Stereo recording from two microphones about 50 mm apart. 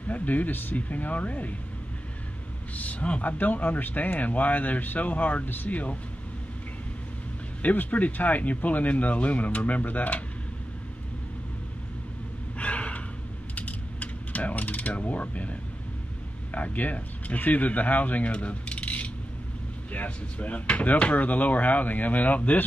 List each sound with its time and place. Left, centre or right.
0.1 s speech: left
2.7 s speech: left
7.6 s speech: left
12.5 s gasp: left
13.6 s coin: left
16.5 s speech: left